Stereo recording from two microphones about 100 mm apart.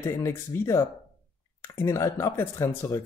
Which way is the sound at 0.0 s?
25° left (ahead or behind).